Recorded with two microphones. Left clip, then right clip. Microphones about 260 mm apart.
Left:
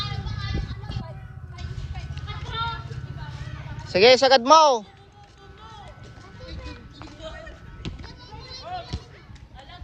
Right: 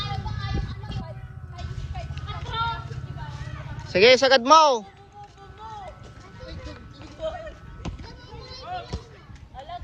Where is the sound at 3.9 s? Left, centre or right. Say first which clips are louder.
Left 1 dB; centre.